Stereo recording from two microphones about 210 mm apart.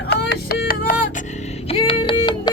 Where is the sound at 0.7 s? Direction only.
45° left (ahead or behind).